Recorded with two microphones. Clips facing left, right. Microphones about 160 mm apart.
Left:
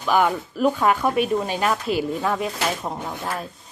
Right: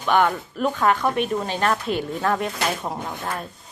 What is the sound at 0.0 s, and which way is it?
Speech, 5° left (ahead or behind).